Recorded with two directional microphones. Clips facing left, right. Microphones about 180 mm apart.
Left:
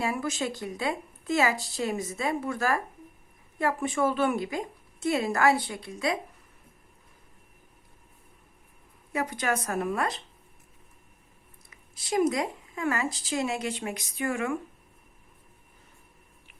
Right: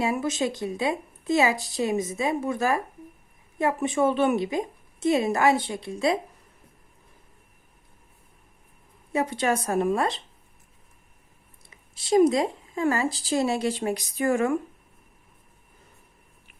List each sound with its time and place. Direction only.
0.0 s speech: 20° right (ahead or behind)
9.1 s speech: 25° right (ahead or behind)
11.7 s speech: 30° right (ahead or behind)